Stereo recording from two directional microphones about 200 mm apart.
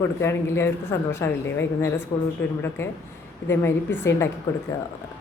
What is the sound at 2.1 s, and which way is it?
Speech, 25° left (ahead or behind).